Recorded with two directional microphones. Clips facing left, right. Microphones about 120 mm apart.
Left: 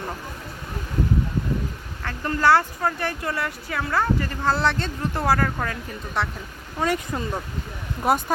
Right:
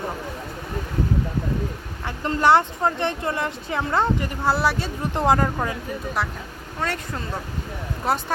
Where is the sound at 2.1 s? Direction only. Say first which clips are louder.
Right 1 dB; 20° right (ahead or behind).